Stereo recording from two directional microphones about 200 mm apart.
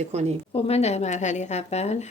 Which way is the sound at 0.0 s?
35° right (ahead or behind).